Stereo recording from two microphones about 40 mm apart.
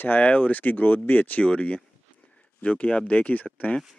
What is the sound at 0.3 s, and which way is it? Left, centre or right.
Speech, left.